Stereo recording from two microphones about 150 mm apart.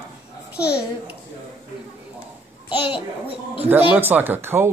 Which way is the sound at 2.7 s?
35° left (ahead or behind).